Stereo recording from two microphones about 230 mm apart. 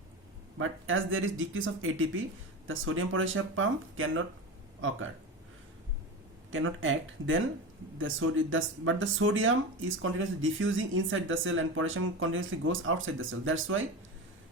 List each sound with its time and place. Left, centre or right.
0.6 s speech: right
6.5 s speech: right